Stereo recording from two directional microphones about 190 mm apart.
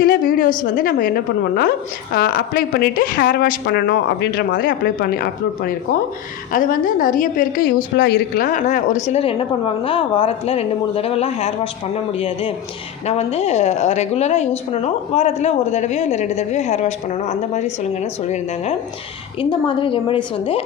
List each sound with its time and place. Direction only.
0.0 s a sound: 50° left (ahead or behind)
0.6 s a woman's voice: 50° left (ahead or behind)
19.4 s a woman's voice: 25° left (ahead or behind)